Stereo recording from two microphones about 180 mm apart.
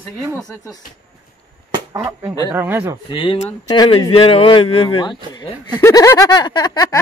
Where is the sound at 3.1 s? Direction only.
30° left (ahead or behind).